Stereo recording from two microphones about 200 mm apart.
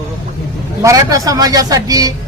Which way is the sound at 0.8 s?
15° right (ahead or behind).